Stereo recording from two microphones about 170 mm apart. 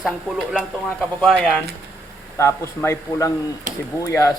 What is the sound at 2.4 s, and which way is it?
A man's voice, 15° left (ahead or behind).